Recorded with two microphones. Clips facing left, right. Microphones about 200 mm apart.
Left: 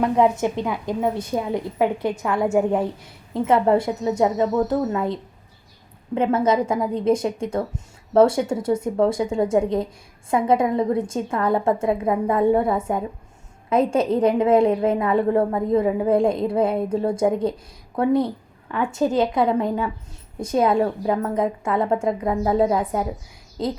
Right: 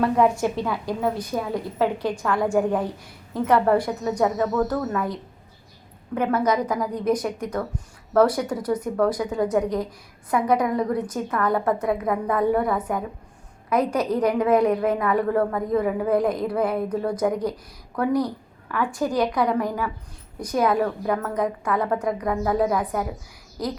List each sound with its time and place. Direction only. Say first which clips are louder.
0.0 s a woman's voice: left 1 dB; 20° left (ahead or behind)